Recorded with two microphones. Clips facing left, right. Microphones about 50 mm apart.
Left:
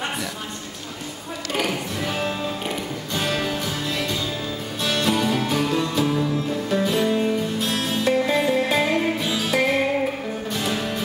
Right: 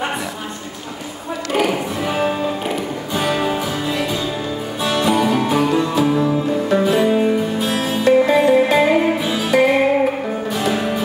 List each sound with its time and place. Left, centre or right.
1.5 s music: centre
10.5 s music: centre